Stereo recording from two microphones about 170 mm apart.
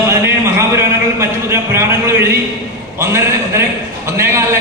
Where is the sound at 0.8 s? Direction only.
15° right (ahead or behind).